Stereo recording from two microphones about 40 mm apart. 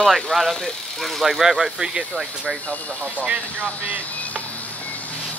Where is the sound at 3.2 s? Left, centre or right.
Right.